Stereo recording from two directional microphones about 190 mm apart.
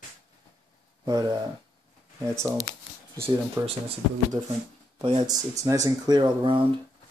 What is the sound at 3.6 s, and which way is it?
Speech, 20° right (ahead or behind).